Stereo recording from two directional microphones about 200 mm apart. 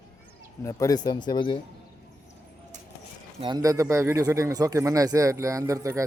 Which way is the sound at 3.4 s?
20° right (ahead or behind).